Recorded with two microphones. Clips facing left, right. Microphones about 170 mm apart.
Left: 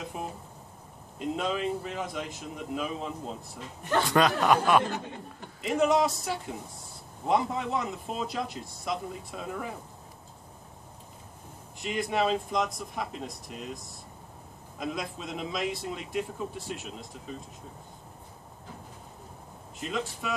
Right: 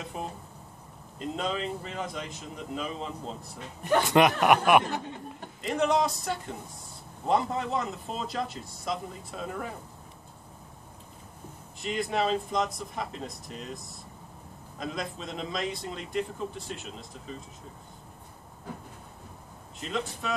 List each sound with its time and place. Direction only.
0.0 s a sound: centre (ahead or behind)
1.2 s speech: 5° left (ahead or behind)
3.9 s speech: 20° right (ahead or behind)
5.6 s speech: 5° left (ahead or behind)
11.8 s speech: centre (ahead or behind)
14.8 s speech: 5° left (ahead or behind)
19.8 s speech: centre (ahead or behind)